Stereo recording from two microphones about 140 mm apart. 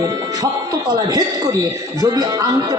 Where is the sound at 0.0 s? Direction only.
25° right (ahead or behind).